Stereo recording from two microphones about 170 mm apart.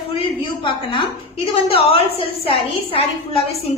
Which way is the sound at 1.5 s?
35° left (ahead or behind).